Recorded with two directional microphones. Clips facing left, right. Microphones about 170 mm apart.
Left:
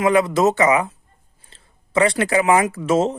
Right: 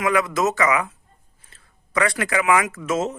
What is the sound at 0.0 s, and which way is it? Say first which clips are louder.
Speech: left 5 dB; 30° left (ahead or behind).